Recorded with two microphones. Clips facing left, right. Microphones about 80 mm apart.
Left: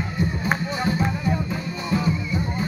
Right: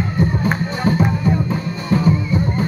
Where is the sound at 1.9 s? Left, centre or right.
Right.